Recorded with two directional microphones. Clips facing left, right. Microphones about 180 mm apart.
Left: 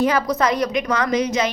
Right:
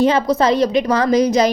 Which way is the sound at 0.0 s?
25° right (ahead or behind).